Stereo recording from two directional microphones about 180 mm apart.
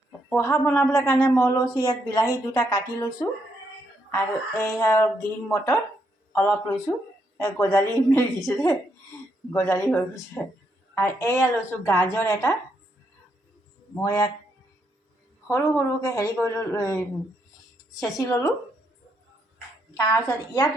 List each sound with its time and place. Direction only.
0.3 s a woman's voice: 15° left (ahead or behind)
9.5 s speech: 15° left (ahead or behind)
14.0 s a woman's voice: 20° left (ahead or behind)
15.4 s a woman's voice: 20° left (ahead or behind)
18.0 s speech: 15° left (ahead or behind)
20.2 s a woman's voice: 20° left (ahead or behind)